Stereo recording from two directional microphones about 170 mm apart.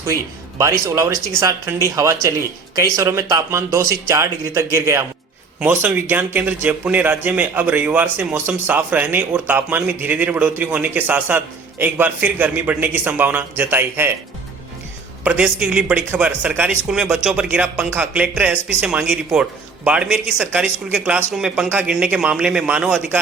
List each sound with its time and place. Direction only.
0.6 s a man's voice: 15° right (ahead or behind)
15.2 s a man's voice: 10° right (ahead or behind)